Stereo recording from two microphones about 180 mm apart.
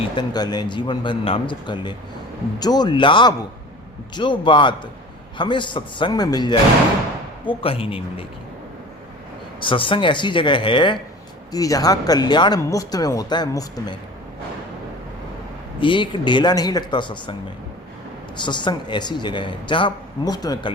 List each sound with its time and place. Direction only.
0.2 s speech: 20° left (ahead or behind)
7.6 s speech: 30° left (ahead or behind)
9.6 s speech: 30° left (ahead or behind)
15.8 s speech: 25° left (ahead or behind)
18.3 s speech: 25° left (ahead or behind)